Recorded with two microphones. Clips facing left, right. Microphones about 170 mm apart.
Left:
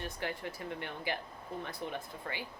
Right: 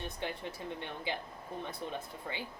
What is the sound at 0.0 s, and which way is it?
Speech, 20° right (ahead or behind).